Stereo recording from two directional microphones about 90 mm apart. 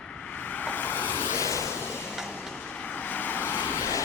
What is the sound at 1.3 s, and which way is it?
Vehicle, 35° left (ahead or behind).